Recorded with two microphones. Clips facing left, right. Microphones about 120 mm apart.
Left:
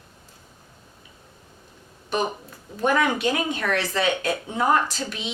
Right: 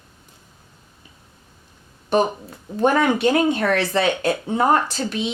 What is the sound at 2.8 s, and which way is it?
Speech, 30° right (ahead or behind).